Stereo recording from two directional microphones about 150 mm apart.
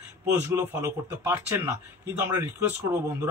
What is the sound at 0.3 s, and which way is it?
A man's voice, 15° right (ahead or behind).